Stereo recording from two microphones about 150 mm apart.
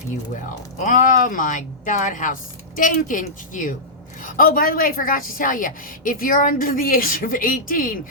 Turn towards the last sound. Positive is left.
turn(degrees=70)  # may be behind; listen again after turning